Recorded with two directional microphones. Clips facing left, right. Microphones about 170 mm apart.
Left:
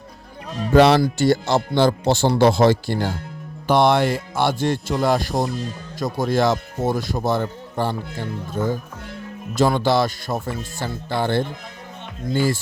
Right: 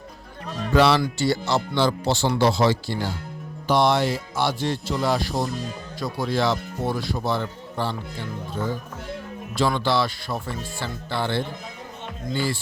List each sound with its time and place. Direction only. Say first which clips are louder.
0.7 s speech: left 5 dB; 50° left (ahead or behind)